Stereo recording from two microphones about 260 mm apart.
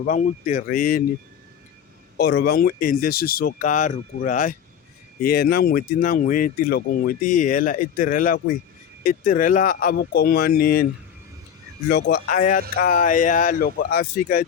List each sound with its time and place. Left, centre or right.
0.0 s speech: left
2.1 s speech: left
11.9 s speech: left